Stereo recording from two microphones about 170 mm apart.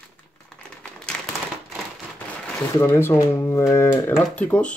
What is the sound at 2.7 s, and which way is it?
Speech, 15° left (ahead or behind).